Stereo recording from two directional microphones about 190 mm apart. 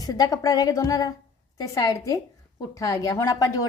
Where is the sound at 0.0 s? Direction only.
20° left (ahead or behind).